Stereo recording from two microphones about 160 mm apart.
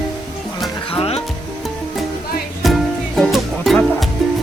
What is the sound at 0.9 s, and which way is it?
Music, 40° left (ahead or behind).